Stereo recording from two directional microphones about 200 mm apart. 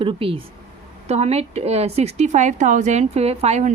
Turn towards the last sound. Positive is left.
turn(degrees=-30)  # may be behind; listen again after turning